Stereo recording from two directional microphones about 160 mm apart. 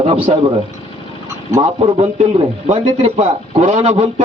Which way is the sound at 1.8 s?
40° right (ahead or behind).